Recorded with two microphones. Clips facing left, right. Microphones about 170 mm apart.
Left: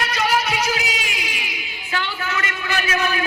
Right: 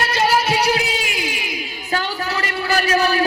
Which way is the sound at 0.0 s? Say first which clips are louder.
Right 3 dB; 30° right (ahead or behind).